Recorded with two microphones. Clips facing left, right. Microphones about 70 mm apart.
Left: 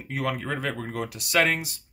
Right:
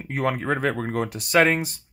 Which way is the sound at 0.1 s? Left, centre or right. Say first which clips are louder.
Right 5 dB; right.